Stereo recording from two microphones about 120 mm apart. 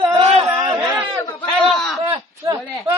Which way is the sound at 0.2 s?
55° right (ahead or behind).